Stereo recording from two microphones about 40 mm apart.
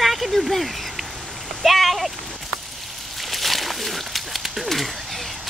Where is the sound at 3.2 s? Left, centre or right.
Centre.